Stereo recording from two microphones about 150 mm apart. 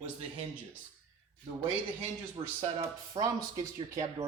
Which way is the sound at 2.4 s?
30° right (ahead or behind).